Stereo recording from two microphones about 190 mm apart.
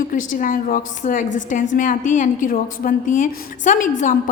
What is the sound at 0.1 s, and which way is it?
A woman's voice, 45° left (ahead or behind).